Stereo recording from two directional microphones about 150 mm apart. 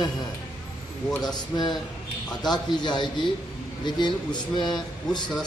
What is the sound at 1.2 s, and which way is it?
A man's voice, 30° left (ahead or behind).